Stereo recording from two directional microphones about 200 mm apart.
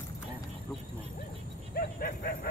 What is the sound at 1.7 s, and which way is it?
Dog, 50° left (ahead or behind).